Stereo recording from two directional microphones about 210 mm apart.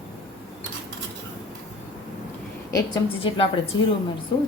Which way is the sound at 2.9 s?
25° left (ahead or behind).